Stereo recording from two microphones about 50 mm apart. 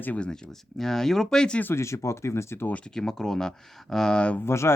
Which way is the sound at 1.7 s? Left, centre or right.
Left.